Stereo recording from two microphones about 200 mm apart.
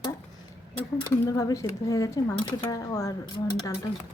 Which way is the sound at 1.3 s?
15° left (ahead or behind).